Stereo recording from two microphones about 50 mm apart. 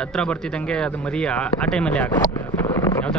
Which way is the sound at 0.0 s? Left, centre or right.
Centre.